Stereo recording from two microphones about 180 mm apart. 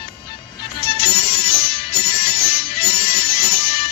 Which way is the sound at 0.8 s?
30° left (ahead or behind).